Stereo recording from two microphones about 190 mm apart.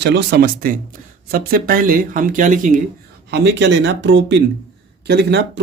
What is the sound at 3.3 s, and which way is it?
Speech, 65° right (ahead or behind).